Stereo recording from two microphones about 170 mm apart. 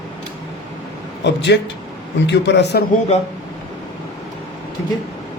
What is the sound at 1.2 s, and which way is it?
A man's voice, 90° left.